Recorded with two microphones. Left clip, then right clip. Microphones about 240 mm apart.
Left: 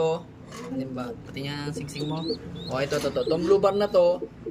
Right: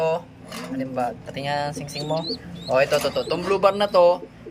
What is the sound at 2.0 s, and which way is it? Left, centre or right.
A man's voice, centre.